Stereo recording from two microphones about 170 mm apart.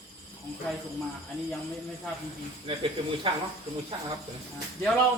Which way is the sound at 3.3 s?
30° right (ahead or behind).